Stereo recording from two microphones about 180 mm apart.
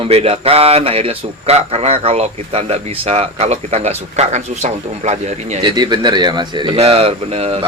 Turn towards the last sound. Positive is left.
turn(degrees=-35)  # may be behind; listen again after turning